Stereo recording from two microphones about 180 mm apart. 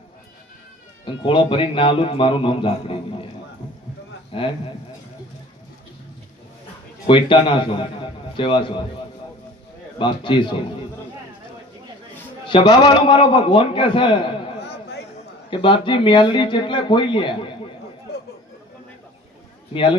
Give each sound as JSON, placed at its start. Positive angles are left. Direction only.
{"t": 1.0, "sound": "a man's voice", "side_deg": 25}
{"t": 4.3, "sound": "a man's voice", "side_deg": 30}
{"t": 7.1, "sound": "a man's voice", "side_deg": 30}
{"t": 10.0, "sound": "a man's voice", "side_deg": 25}
{"t": 12.5, "sound": "a man's voice", "side_deg": 25}
{"t": 14.6, "sound": "a sound", "side_deg": 65}
{"t": 15.4, "sound": "a man's voice", "side_deg": 25}